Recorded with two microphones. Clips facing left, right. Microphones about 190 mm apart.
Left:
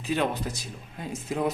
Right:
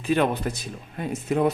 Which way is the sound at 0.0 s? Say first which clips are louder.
Right 5 dB; 55° right (ahead or behind).